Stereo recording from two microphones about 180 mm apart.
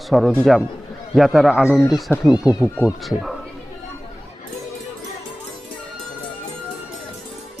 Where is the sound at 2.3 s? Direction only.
20° left (ahead or behind).